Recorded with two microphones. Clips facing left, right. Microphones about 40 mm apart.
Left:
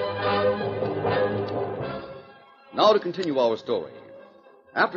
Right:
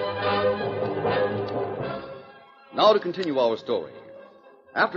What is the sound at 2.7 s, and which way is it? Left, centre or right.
A man's voice, centre.